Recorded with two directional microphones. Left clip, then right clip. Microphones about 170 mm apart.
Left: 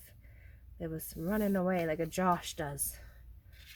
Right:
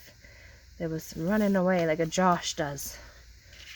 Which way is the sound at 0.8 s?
30° right (ahead or behind).